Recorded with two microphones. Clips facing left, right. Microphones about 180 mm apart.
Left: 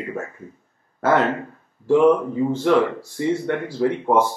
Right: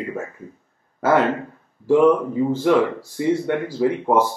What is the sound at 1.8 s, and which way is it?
Speech, centre (ahead or behind).